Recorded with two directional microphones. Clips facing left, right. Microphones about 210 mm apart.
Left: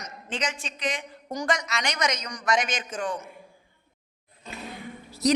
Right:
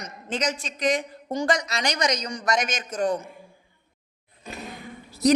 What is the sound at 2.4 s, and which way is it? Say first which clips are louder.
Speech: even; 40° right (ahead or behind).